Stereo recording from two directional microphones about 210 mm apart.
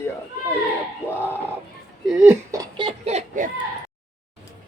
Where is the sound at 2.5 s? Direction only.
20° right (ahead or behind).